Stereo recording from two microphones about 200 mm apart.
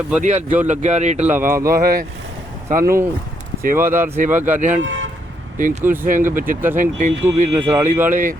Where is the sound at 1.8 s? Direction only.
45° right (ahead or behind).